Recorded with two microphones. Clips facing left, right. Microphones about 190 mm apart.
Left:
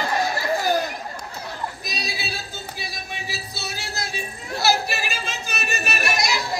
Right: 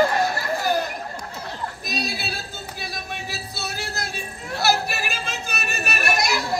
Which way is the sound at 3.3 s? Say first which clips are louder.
Right 1 dB; 55° right (ahead or behind).